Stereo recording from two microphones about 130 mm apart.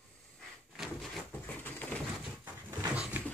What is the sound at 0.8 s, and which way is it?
Drawer open or close, centre (ahead or behind).